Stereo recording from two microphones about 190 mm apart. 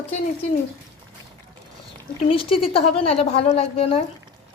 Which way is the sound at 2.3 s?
30° left (ahead or behind).